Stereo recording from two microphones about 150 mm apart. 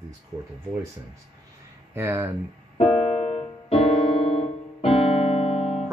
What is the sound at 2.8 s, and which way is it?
Keyboard, 45° left (ahead or behind).